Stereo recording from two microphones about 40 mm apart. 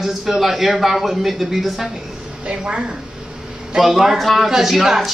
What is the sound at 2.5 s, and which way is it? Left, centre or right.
Speech, right.